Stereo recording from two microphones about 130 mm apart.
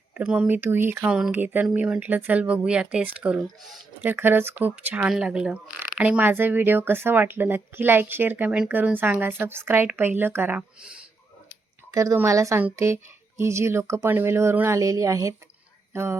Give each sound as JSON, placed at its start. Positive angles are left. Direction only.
{"t": 0.1, "sound": "speech", "side_deg": -10}
{"t": 11.9, "sound": "speech", "side_deg": -25}